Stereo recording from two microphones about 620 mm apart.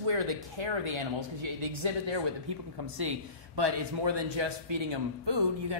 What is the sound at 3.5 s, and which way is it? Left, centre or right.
A man's voice, right.